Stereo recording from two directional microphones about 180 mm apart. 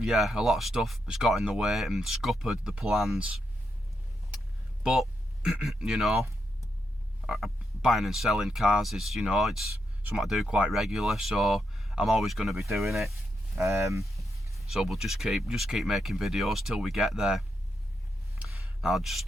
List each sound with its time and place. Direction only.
0.0 s frog: centre (ahead or behind)
4.8 s speech: 5° right (ahead or behind)
7.3 s frog: centre (ahead or behind)
13.6 s speech: 15° right (ahead or behind)
14.7 s frog: centre (ahead or behind)
18.3 s a sound: centre (ahead or behind)